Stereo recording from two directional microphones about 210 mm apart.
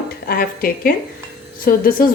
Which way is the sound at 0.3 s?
45° left (ahead or behind).